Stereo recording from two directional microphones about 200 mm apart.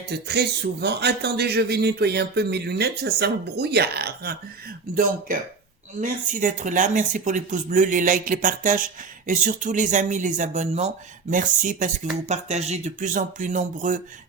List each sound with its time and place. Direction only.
0.1 s speech: 55° right (ahead or behind)
6.0 s speech: 40° right (ahead or behind)